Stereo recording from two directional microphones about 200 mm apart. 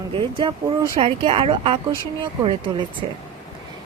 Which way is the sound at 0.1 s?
25° right (ahead or behind).